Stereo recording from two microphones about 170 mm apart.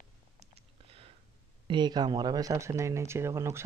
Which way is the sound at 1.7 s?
25° right (ahead or behind).